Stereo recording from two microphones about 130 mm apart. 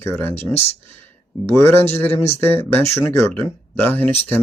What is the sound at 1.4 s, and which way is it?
Speech, 20° left (ahead or behind).